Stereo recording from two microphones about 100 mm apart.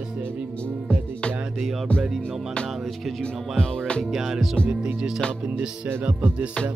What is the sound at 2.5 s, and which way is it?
Music, 10° left (ahead or behind).